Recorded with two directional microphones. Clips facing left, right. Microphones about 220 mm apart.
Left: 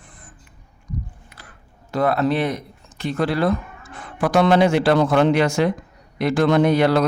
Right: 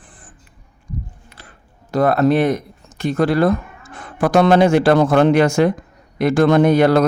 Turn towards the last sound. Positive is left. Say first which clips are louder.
# right 4 dB
turn(degrees=-50)  # may be behind; listen again after turning